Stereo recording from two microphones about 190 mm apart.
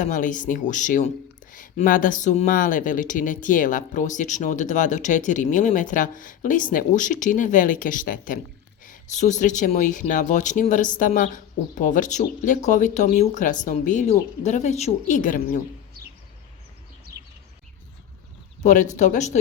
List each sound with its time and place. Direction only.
0.0 s speech: 45° left (ahead or behind)
18.6 s speech: 40° left (ahead or behind)